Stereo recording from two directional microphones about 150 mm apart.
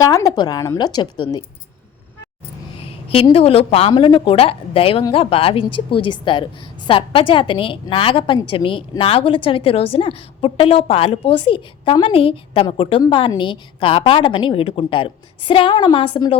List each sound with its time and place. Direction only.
0.0 s a woman's voice: 25° left (ahead or behind)
2.7 s a woman's voice: 40° left (ahead or behind)